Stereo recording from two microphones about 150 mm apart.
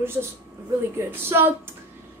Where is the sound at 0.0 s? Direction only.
15° right (ahead or behind).